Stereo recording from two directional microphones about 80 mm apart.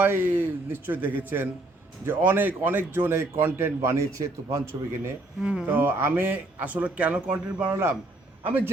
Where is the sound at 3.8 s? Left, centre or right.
Right; by 7.7 s centre.